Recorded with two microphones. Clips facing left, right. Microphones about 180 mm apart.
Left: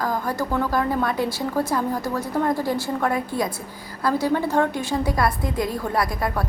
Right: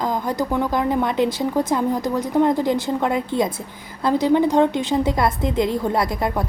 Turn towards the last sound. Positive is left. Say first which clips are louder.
# right 3 dB
turn(degrees=-20)  # may be behind; listen again after turning